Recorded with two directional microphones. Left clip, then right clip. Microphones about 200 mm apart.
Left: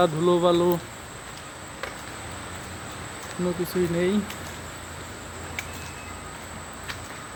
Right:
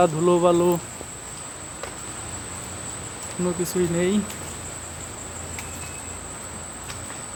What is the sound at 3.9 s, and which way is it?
Speech, 5° right (ahead or behind).